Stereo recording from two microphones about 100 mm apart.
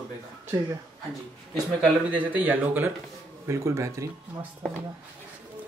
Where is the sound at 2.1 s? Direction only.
15° right (ahead or behind).